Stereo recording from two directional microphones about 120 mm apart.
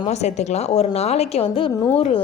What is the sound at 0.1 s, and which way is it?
A woman's voice, 70° left (ahead or behind).